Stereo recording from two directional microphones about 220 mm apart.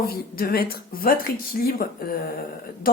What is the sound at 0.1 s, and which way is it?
Speech, 40° left (ahead or behind).